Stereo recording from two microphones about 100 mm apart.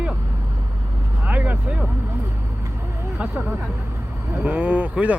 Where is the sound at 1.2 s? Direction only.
15° right (ahead or behind).